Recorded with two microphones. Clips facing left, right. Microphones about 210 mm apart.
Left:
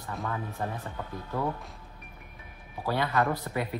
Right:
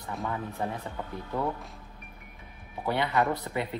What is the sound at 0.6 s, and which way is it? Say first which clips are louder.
Speech: right 2 dB; 15° right (ahead or behind).